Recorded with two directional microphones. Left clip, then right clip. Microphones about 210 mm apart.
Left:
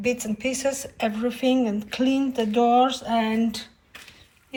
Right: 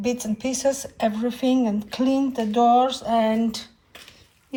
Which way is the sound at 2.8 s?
45° right (ahead or behind).